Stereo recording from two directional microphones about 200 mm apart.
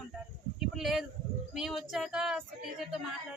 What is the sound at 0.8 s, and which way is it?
Speech, centre (ahead or behind).